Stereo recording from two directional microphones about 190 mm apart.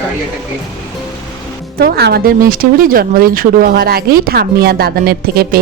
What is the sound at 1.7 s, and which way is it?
Speech, 55° right (ahead or behind).